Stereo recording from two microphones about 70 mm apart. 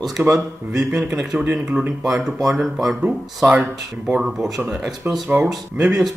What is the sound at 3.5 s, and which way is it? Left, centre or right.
Speech, centre.